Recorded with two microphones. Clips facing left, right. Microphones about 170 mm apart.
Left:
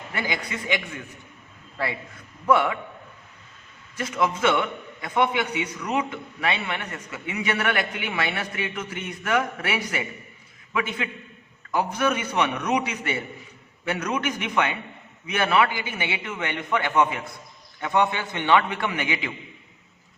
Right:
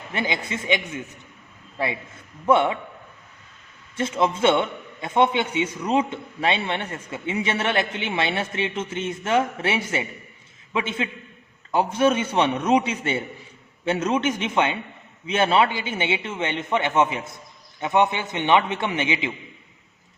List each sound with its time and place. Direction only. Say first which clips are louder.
0.1 s a man's voice: right 3 dB; 25° right (ahead or behind)
3.9 s a man's voice: right 3 dB; 25° right (ahead or behind)